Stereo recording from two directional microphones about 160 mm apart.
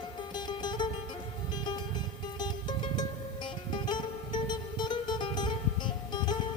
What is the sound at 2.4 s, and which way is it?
Music, 25° left (ahead or behind).